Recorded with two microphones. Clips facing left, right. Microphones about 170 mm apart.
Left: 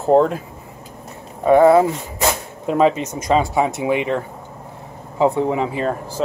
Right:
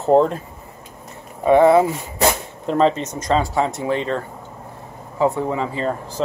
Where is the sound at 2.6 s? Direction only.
5° left (ahead or behind).